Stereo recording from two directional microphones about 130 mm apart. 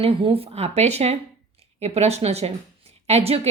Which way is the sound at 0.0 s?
45° right (ahead or behind).